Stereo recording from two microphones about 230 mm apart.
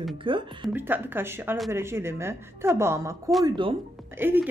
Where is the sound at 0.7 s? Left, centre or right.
Centre.